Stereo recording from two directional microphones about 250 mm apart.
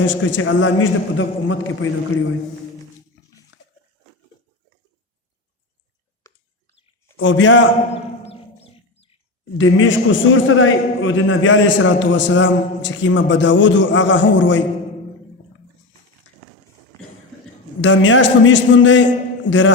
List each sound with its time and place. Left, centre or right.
0.0 s a man's voice: left
3.5 s a sound: left
7.2 s a man's voice: left
8.2 s a sound: left
9.6 s a man's voice: left
17.7 s a man's voice: left